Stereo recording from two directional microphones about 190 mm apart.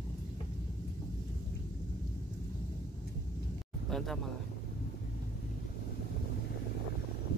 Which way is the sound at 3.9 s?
Centre (ahead or behind).